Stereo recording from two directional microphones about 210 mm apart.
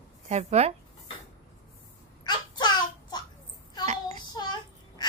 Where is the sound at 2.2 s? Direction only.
20° left (ahead or behind).